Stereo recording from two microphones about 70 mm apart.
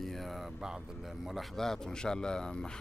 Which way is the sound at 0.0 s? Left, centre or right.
Centre.